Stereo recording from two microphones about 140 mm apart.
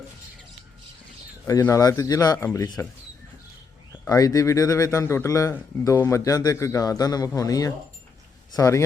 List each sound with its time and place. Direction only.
1.5 s speech: 20° left (ahead or behind)
4.0 s speech: 25° left (ahead or behind)